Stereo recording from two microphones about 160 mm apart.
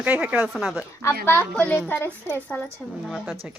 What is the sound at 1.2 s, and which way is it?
A woman's voice, 15° left (ahead or behind).